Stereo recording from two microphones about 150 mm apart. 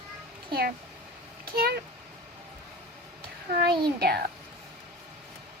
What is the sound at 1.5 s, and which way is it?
Speech, 90° right.